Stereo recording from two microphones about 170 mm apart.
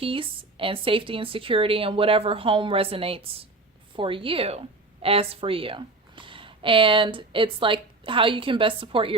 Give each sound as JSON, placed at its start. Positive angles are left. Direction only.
{"t": 0.0, "sound": "speech", "side_deg": -30}